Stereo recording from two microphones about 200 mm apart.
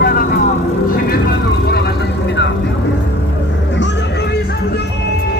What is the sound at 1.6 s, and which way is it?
Vehicle, 60° left (ahead or behind).